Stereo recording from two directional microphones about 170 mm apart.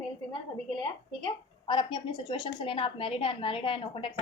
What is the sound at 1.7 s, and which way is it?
A woman's voice, 30° left (ahead or behind).